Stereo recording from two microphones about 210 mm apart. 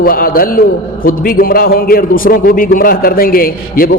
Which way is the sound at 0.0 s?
45° left (ahead or behind).